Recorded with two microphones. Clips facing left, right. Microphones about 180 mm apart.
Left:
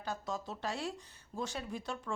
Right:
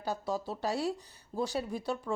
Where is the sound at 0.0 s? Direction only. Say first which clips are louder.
Right 5 dB; 35° right (ahead or behind).